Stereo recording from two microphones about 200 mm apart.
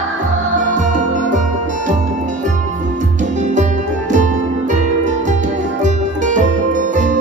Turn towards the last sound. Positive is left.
turn(degrees=-40)  # may be behind; listen again after turning